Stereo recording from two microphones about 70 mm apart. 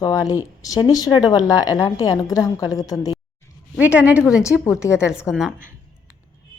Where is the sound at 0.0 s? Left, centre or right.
Left.